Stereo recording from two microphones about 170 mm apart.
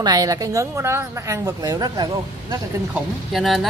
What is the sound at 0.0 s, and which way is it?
A woman's voice, 20° right (ahead or behind).